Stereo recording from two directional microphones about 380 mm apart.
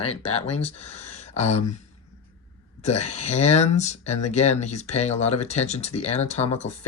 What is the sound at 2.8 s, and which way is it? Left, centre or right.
Speech, centre.